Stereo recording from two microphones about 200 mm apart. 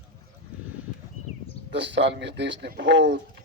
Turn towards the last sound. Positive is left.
turn(degrees=-60)  # may be behind; listen again after turning